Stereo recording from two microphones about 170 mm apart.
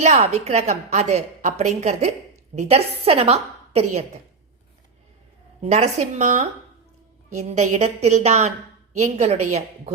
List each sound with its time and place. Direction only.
0.0 s a woman's voice: 40° right (ahead or behind)
5.7 s a woman's voice: 40° right (ahead or behind)